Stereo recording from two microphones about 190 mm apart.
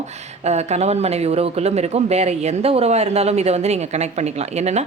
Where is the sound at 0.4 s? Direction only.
35° right (ahead or behind).